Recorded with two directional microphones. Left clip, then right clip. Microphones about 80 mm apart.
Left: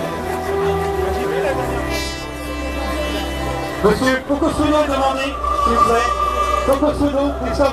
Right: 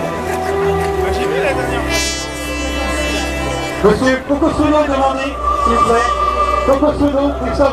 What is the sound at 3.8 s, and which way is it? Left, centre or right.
Speech, left.